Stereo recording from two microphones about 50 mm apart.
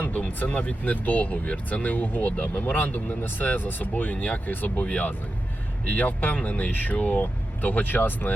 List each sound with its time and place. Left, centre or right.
0.0 s speech: left